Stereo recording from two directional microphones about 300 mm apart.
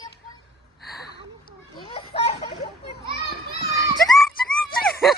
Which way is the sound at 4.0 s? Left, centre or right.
Centre.